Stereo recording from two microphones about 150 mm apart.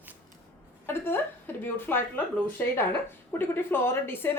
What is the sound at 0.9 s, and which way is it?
A woman's voice, 15° left (ahead or behind).